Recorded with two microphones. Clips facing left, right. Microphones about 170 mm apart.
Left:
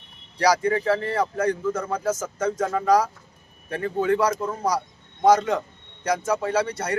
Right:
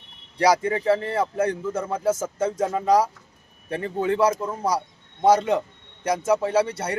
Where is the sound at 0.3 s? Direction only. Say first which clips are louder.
Even; 25° right (ahead or behind).